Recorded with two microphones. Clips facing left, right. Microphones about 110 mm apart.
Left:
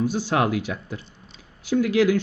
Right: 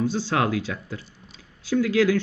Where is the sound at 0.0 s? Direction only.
15° left (ahead or behind).